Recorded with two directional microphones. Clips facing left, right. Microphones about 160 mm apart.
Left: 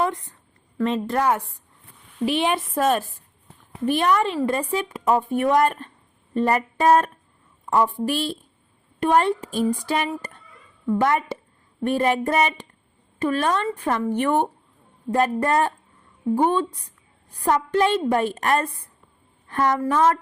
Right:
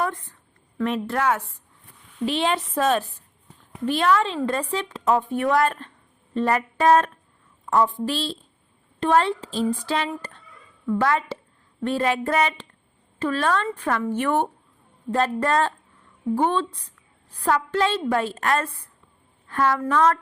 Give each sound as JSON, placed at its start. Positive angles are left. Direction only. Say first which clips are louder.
{"t": 0.0, "sound": "a woman's voice", "louder": "left 3 dB", "side_deg": 20}